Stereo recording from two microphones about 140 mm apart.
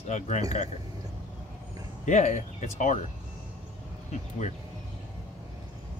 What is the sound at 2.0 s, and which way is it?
Speech, 60° left (ahead or behind).